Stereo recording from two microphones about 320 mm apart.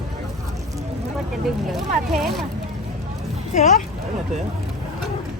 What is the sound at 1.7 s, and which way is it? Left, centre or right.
Speech, centre.